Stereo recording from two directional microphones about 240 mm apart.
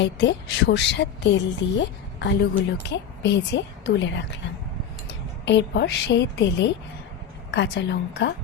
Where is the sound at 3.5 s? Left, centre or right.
Left.